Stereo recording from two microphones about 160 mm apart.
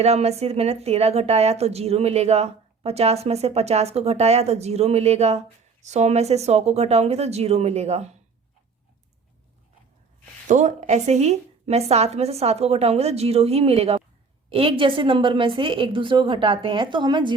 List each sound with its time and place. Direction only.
0.0 s a woman's voice: 40° right (ahead or behind)
10.5 s a woman's voice: 50° right (ahead or behind); by 17.3 s 30° right (ahead or behind)